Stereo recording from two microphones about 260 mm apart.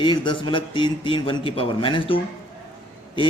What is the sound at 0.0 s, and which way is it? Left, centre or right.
A man's voice, centre.